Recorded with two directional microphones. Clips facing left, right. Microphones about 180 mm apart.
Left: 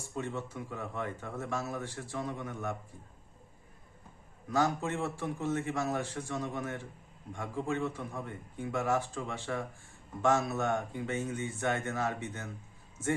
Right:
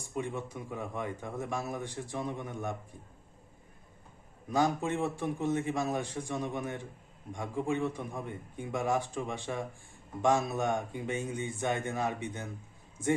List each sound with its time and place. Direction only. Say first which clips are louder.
0.1 s a man's voice: right 2 dB; 15° right (ahead or behind)
4.4 s a man's voice: right 1 dB; 15° right (ahead or behind)